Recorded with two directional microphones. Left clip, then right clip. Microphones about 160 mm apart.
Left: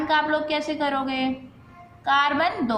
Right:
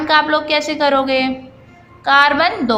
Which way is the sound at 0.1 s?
20° right (ahead or behind).